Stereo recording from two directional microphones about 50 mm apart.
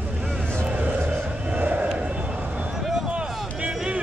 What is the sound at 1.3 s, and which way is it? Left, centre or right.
Vehicle, right.